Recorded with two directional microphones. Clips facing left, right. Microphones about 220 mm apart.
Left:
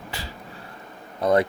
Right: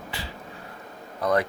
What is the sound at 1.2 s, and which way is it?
Speech, 25° left (ahead or behind).